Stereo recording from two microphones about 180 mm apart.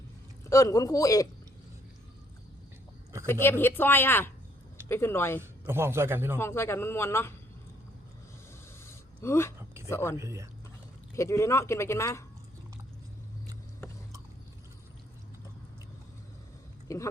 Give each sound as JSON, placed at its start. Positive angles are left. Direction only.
{"t": 0.5, "sound": "speech", "side_deg": 20}
{"t": 3.2, "sound": "speech", "side_deg": 15}
{"t": 5.4, "sound": "a man's voice", "side_deg": -15}
{"t": 6.4, "sound": "speech", "side_deg": 15}
{"t": 8.8, "sound": "a sound", "side_deg": 15}
{"t": 9.9, "sound": "speech", "side_deg": 15}
{"t": 10.2, "sound": "a man's voice", "side_deg": -15}
{"t": 11.1, "sound": "speech", "side_deg": 15}
{"t": 16.9, "sound": "speech", "side_deg": 15}